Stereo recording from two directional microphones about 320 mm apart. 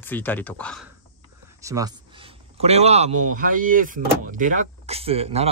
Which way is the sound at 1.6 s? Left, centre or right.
Centre.